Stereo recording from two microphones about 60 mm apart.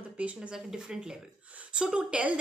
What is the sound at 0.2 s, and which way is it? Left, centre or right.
A woman's voice, right.